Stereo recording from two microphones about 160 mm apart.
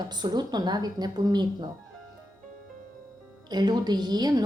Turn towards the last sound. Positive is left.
turn(degrees=-25)  # may be behind; listen again after turning